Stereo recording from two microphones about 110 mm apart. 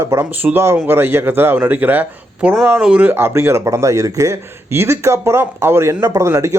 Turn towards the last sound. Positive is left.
turn(degrees=-25)  # may be behind; listen again after turning